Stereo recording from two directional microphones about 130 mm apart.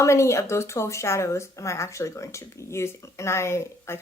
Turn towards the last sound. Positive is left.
turn(degrees=20)  # may be behind; listen again after turning